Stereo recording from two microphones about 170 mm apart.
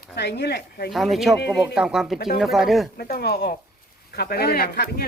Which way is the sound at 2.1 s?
65° left (ahead or behind).